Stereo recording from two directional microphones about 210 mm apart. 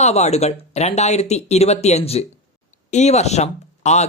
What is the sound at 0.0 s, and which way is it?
Speech, 30° left (ahead or behind).